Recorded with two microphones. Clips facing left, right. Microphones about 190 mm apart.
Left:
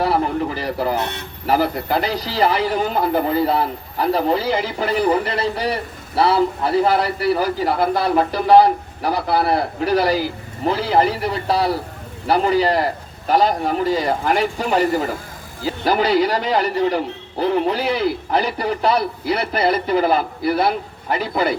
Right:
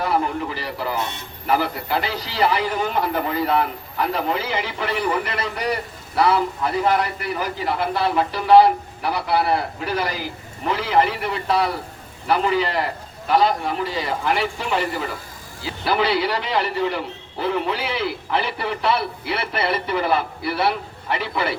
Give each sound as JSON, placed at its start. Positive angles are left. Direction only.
{"t": 0.0, "sound": "a man's voice", "side_deg": 40}